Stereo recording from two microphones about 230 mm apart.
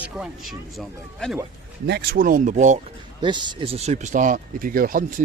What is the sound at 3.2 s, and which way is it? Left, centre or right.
Speech, centre.